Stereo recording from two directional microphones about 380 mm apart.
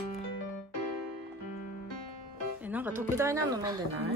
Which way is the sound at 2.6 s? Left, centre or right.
Centre.